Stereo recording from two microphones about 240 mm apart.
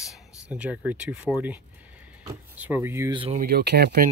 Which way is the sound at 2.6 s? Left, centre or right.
Centre.